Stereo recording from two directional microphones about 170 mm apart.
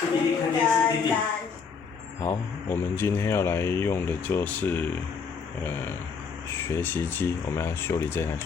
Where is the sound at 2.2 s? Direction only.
15° left (ahead or behind).